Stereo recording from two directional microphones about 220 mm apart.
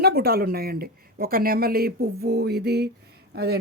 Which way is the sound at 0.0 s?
45° right (ahead or behind).